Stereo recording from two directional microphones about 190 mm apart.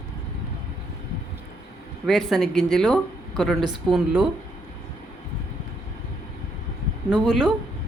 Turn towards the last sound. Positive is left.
turn(degrees=0)  # may be behind; listen again after turning